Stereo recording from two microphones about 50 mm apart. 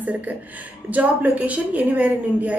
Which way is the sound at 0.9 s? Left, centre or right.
Right.